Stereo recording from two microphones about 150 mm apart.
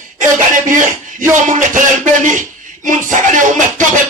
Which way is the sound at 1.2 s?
60° right (ahead or behind).